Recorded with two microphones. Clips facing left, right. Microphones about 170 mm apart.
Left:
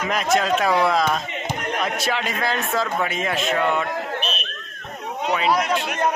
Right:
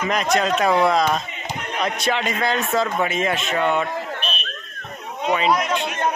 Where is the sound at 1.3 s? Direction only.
55° left (ahead or behind).